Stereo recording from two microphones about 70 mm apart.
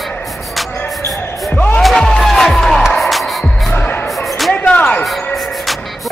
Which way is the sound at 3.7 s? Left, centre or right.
Left.